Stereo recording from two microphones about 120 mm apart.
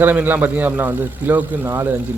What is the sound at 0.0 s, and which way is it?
A man's voice, 15° right (ahead or behind).